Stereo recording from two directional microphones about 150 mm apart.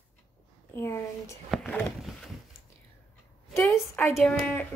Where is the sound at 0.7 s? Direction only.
15° left (ahead or behind).